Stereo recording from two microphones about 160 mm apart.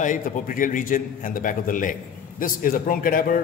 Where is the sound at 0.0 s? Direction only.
55° left (ahead or behind).